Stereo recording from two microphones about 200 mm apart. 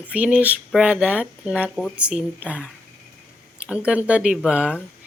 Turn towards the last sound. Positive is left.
turn(degrees=-5)  # may be behind; listen again after turning